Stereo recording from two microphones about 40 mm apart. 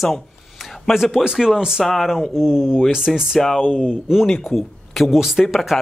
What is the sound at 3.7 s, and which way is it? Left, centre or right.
Speech, centre.